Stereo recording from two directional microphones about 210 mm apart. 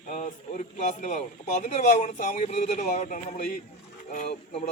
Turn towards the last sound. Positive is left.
turn(degrees=35)  # may be behind; listen again after turning